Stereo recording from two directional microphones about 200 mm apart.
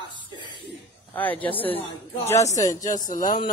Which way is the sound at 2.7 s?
40° left (ahead or behind).